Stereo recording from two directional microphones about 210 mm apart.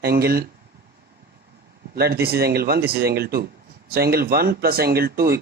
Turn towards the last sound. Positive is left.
turn(degrees=-45)  # may be behind; listen again after turning